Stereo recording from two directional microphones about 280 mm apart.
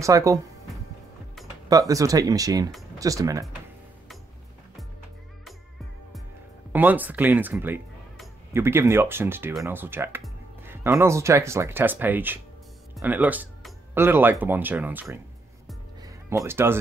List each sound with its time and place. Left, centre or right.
0.0 s speech: centre
1.7 s speech: centre
6.7 s speech: centre
16.0 s music: centre